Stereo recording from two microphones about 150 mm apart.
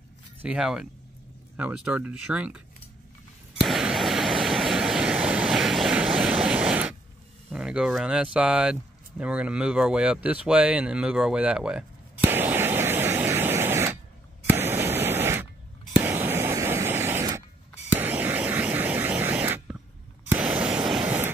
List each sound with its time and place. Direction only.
0.4 s speech: 5° right (ahead or behind)
3.5 s waves: 5° right (ahead or behind)
7.5 s speech: 5° right (ahead or behind)
9.2 s a sound: 10° right (ahead or behind)